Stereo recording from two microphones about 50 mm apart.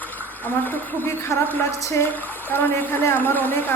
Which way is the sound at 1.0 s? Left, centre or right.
Left.